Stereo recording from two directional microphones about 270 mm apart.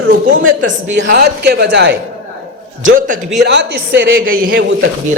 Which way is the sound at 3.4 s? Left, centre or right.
Right.